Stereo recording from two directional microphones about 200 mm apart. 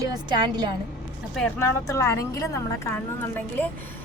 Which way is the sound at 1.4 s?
10° left (ahead or behind).